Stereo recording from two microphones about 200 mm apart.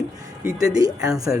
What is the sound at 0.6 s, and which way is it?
Speech, 20° right (ahead or behind).